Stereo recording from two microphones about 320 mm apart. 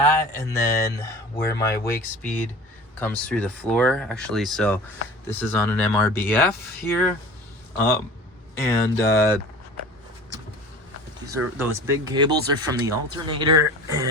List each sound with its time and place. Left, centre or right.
0.0 s speech: centre
3.0 s speech: centre
11.3 s speech: centre
13.5 s speech: right